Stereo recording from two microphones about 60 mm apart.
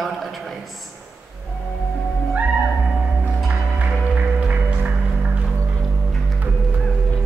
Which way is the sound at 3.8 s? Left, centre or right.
Right.